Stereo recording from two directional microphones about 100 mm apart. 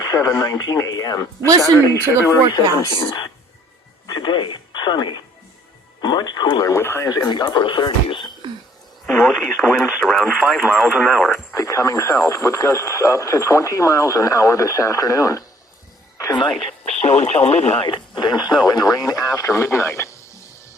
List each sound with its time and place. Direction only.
0.0 s speech: 30° left (ahead or behind)
2.5 s speech: 45° left (ahead or behind)
6.7 s speech: 25° left (ahead or behind)
7.3 s speech: 45° left (ahead or behind)
9.2 s radio: 5° left (ahead or behind)
9.6 s speech: 5° left (ahead or behind)
10.2 s speech: 5° right (ahead or behind)
11.3 s speech: 30° left (ahead or behind)
16.6 s speech: 75° left (ahead or behind)
17.8 s speech: 50° left (ahead or behind); by 20.1 s 30° left (ahead or behind)